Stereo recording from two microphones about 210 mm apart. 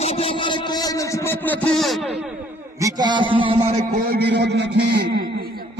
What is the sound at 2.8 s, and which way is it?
Speech, 15° right (ahead or behind).